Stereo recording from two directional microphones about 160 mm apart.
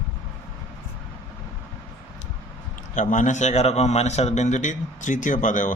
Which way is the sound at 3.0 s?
50° left (ahead or behind).